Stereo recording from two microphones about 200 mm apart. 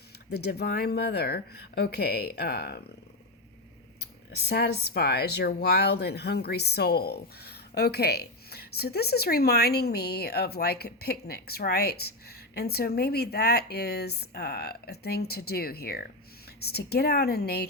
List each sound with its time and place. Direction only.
0.3 s speech: 55° left (ahead or behind)
4.4 s speech: 55° left (ahead or behind)